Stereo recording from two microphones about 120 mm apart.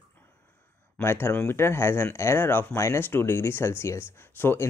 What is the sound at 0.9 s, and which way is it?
Speech, 20° left (ahead or behind).